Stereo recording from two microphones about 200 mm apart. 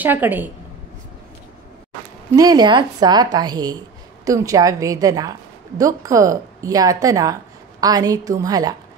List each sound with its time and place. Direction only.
0.0 s a woman's voice: 10° right (ahead or behind)
2.3 s a woman's voice: 20° right (ahead or behind)